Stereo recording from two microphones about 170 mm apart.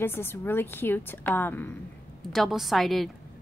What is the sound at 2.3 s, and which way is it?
Speech, centre (ahead or behind).